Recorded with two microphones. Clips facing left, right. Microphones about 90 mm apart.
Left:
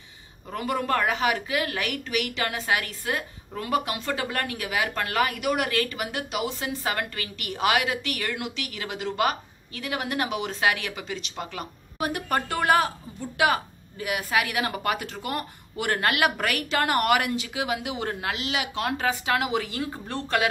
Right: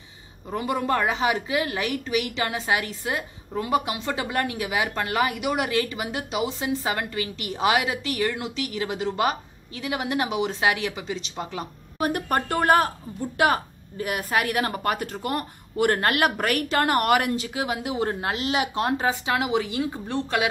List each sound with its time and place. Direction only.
0.5 s speech: 15° right (ahead or behind)
12.0 s a woman's voice: 40° right (ahead or behind); by 20.4 s 15° right (ahead or behind)